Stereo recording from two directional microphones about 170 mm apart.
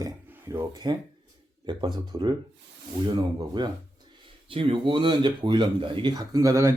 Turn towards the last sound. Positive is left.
turn(degrees=-20)  # may be behind; listen again after turning